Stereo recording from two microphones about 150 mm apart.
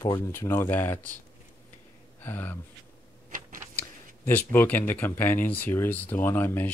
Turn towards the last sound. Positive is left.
turn(degrees=15)  # may be behind; listen again after turning